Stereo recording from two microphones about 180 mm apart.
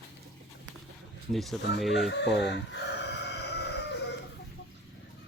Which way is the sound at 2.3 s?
70° left (ahead or behind).